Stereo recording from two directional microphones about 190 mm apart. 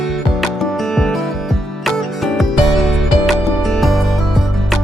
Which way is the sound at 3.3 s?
Centre (ahead or behind).